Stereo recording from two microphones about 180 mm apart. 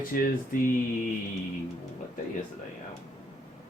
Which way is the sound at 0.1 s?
50° left (ahead or behind).